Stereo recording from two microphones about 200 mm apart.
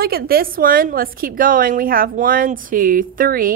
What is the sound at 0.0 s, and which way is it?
A woman's voice, 50° right (ahead or behind).